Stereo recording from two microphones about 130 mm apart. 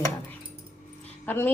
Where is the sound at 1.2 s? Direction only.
15° left (ahead or behind).